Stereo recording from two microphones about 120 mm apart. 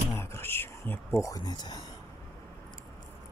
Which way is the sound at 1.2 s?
30° left (ahead or behind).